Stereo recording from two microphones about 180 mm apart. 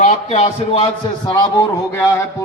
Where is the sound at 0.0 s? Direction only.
35° left (ahead or behind).